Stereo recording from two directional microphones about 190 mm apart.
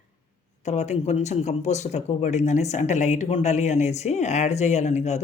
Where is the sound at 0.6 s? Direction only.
35° left (ahead or behind).